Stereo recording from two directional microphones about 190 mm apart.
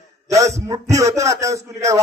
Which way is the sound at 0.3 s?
15° right (ahead or behind).